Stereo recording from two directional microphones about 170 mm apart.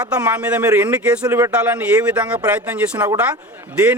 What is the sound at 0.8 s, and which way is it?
Speech, 10° right (ahead or behind).